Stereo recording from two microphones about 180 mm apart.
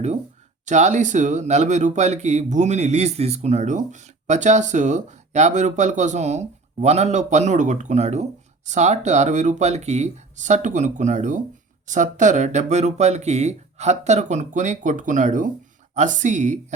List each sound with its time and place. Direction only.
0.6 s a woman's voice: 40° right (ahead or behind)